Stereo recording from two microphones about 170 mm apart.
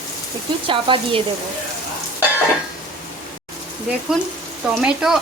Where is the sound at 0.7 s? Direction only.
30° right (ahead or behind).